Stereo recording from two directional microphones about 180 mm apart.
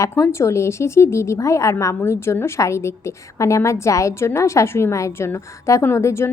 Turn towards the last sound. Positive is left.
turn(degrees=15)  # may be behind; listen again after turning